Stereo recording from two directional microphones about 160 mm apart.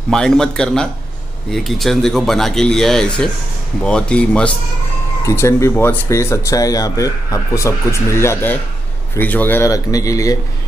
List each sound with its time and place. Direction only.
0.1 s speech: 5° left (ahead or behind)
5.2 s a man's voice: 15° left (ahead or behind)